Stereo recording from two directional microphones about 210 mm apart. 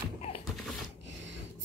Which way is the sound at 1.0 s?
60° right (ahead or behind).